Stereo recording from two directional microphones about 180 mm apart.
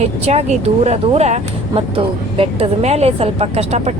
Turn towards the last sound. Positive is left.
turn(degrees=-35)  # may be behind; listen again after turning